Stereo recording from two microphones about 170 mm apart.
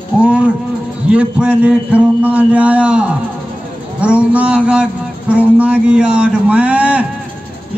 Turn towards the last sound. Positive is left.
turn(degrees=-5)  # may be behind; listen again after turning